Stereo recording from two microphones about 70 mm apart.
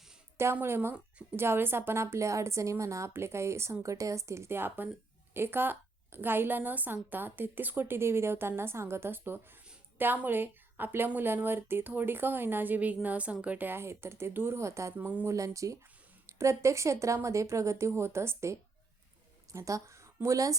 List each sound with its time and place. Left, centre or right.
0.6 s a woman's voice: right; by 13.7 s centre
13.7 s a woman's voice: right
14.9 s speech: right
15.3 s speech: right
19.5 s a woman's voice: right